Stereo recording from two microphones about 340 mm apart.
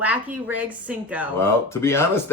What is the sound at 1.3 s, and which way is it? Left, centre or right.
Speech, centre.